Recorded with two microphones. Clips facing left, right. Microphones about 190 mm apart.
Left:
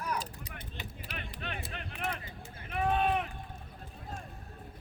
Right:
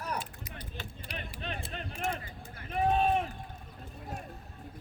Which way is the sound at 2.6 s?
30° right (ahead or behind).